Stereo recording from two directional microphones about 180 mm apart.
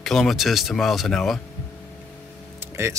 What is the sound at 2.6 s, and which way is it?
Music, 15° right (ahead or behind).